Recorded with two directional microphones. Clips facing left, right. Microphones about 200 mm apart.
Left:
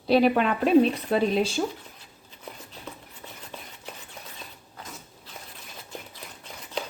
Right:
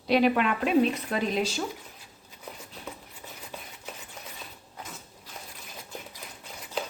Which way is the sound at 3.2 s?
10° right (ahead or behind).